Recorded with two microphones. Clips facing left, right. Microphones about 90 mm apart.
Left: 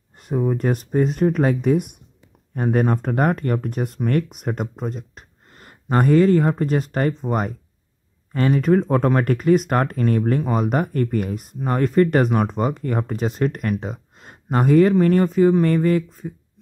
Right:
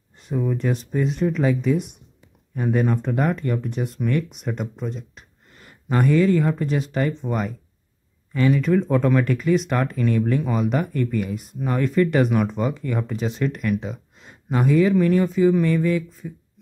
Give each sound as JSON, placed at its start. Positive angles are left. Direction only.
{"t": 0.4, "sound": "speech", "side_deg": 40}